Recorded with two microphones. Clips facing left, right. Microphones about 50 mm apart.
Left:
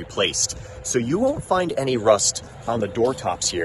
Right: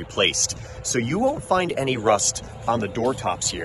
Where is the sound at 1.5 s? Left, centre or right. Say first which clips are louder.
Even; right.